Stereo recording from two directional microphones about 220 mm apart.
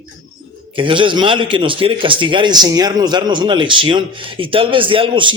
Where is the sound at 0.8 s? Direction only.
20° right (ahead or behind).